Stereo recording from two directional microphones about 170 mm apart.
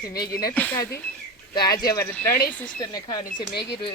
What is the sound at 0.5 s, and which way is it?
Speech, 10° left (ahead or behind).